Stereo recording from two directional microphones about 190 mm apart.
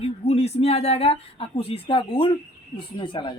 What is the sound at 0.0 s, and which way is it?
Speech, 30° left (ahead or behind).